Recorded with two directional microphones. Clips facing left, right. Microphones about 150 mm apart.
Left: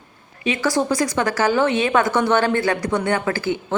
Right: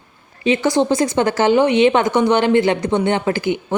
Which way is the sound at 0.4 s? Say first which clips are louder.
Right 5 dB; 25° right (ahead or behind).